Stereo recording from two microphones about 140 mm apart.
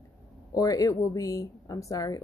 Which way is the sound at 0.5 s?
25° left (ahead or behind).